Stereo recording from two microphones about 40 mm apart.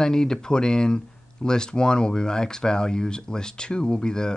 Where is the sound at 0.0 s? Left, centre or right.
Centre.